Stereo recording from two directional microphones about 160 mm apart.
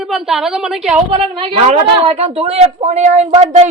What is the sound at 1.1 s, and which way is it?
A woman's voice, 40° right (ahead or behind).